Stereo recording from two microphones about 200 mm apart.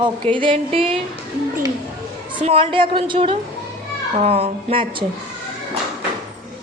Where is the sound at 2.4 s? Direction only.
25° right (ahead or behind).